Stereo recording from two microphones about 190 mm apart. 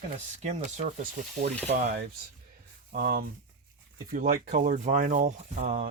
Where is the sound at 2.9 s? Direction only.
50° right (ahead or behind).